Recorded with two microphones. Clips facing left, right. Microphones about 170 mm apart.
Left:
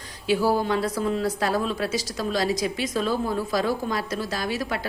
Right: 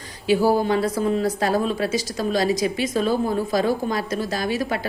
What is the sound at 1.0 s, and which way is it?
A woman's voice, centre (ahead or behind).